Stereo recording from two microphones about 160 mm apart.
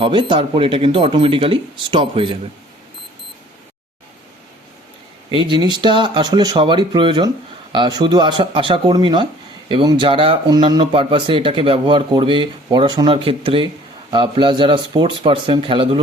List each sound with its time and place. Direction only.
0.0 s speech: 30° right (ahead or behind)
5.5 s speech: 30° right (ahead or behind)